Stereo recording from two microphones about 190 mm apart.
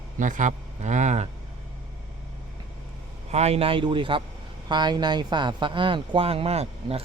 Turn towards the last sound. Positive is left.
turn(degrees=-35)  # may be behind; listen again after turning